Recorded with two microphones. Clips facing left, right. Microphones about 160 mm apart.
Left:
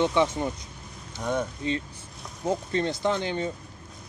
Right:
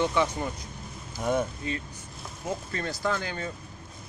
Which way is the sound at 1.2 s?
5° right (ahead or behind).